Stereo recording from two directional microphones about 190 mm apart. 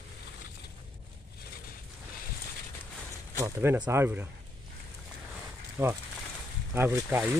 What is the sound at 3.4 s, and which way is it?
Speech, 15° right (ahead or behind).